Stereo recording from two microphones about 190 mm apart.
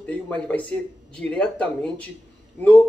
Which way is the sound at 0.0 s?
5° left (ahead or behind).